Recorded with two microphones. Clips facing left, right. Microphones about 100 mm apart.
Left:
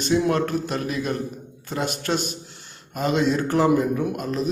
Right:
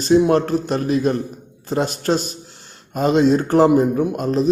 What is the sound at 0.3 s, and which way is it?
Speech, 35° right (ahead or behind).